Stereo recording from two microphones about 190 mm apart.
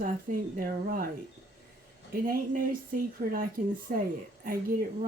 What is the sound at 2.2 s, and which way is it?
Speech, 45° right (ahead or behind).